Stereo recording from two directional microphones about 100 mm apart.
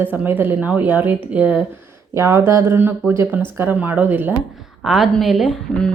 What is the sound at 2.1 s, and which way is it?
A woman's voice, 30° right (ahead or behind).